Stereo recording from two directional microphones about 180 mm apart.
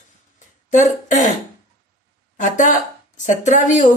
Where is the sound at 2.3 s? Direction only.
45° left (ahead or behind).